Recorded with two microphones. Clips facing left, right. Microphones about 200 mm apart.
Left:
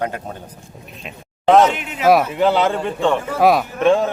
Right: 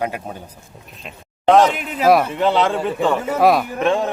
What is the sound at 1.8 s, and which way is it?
Speech, 35° right (ahead or behind).